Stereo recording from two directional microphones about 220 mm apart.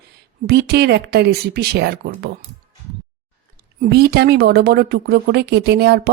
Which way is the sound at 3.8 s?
45° right (ahead or behind).